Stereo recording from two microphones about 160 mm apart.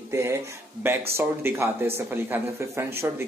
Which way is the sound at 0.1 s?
15° right (ahead or behind).